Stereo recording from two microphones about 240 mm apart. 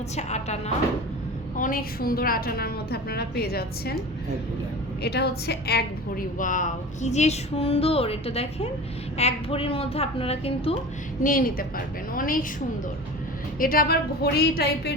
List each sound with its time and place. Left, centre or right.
0.2 s a woman's voice: left
5.0 s a woman's voice: left
11.2 s a woman's voice: left